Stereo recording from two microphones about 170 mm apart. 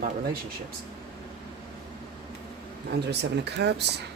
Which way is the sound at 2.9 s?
75° right (ahead or behind).